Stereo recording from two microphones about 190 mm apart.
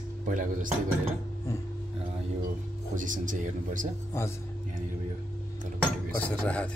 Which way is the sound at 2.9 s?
45° right (ahead or behind).